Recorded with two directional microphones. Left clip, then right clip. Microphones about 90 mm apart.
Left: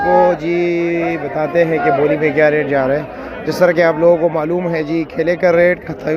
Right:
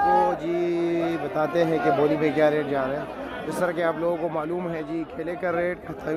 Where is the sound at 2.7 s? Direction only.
20° left (ahead or behind).